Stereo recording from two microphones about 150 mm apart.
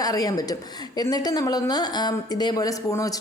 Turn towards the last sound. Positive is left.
turn(degrees=25)  # may be behind; listen again after turning